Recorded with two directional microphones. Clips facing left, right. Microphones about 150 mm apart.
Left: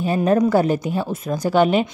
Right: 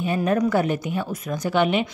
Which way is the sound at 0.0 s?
35° left (ahead or behind).